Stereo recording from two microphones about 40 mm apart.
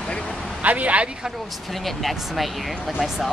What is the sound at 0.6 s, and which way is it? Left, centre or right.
Speech, right.